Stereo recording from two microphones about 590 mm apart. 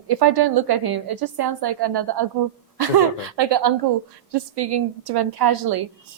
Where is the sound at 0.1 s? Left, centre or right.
Right.